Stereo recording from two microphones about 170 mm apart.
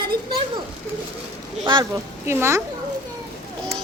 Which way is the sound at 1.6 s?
25° right (ahead or behind).